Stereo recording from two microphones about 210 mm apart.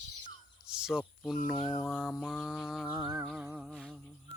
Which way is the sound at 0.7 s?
5° right (ahead or behind).